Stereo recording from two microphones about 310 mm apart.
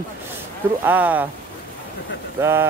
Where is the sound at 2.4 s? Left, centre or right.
Centre.